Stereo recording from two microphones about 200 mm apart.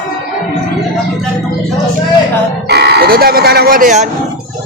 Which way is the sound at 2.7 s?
55° right (ahead or behind).